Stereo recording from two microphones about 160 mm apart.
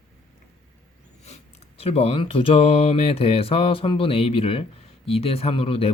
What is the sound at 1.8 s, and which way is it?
Mantra, 40° left (ahead or behind).